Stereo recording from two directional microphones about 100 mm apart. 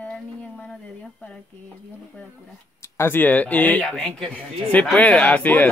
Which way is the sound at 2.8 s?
25° left (ahead or behind).